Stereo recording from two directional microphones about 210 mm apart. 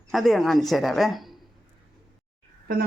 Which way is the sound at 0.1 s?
Centre (ahead or behind).